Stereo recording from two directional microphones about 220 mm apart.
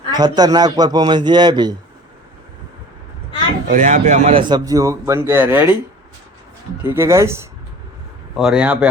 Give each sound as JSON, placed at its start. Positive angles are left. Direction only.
{"t": 0.1, "sound": "a man's voice", "side_deg": -20}
{"t": 3.7, "sound": "a man's voice", "side_deg": -35}
{"t": 6.8, "sound": "a man's voice", "side_deg": -10}
{"t": 8.4, "sound": "speech", "side_deg": -5}